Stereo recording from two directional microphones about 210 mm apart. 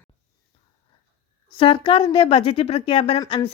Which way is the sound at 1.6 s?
25° left (ahead or behind).